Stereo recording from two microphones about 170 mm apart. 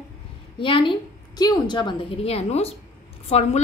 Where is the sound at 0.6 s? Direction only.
30° left (ahead or behind).